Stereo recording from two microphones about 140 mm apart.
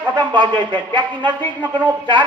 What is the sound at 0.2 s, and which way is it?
Speech, 35° right (ahead or behind).